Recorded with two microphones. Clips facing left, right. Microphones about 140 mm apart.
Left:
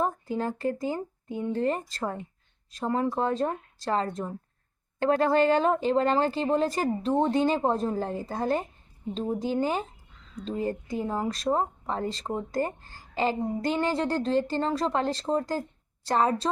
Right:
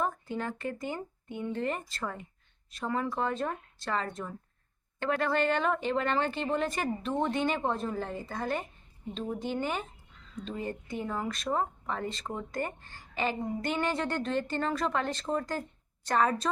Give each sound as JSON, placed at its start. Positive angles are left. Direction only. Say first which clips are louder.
{"t": 0.0, "sound": "a woman's voice", "louder": "left 4 dB", "side_deg": 35}